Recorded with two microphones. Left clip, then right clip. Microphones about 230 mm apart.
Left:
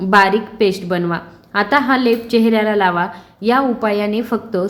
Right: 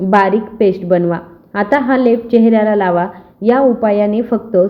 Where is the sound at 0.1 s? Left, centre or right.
Centre.